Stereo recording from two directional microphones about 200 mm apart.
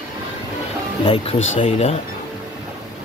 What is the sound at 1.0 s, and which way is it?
Speech, 25° left (ahead or behind).